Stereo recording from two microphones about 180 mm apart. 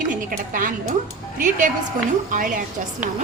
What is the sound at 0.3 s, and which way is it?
A woman's voice, 50° right (ahead or behind).